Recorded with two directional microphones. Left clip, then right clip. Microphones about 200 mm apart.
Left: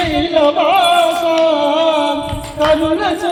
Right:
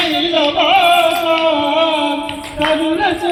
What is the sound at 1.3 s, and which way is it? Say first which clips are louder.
Music: left 1 dB; 60° left (ahead or behind).